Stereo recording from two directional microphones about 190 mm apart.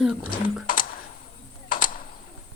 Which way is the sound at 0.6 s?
50° left (ahead or behind).